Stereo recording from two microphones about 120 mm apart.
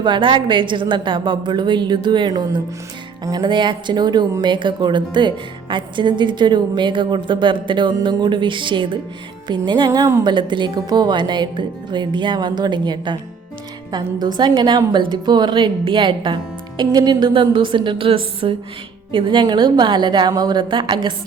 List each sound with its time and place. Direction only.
0.0 s speech: 45° right (ahead or behind)
10.2 s speech: 40° right (ahead or behind)